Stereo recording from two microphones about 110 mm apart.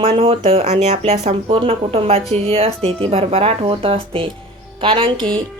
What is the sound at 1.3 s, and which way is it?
Speech, 55° right (ahead or behind).